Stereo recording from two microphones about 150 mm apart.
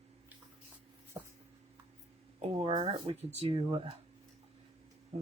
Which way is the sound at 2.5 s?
35° right (ahead or behind).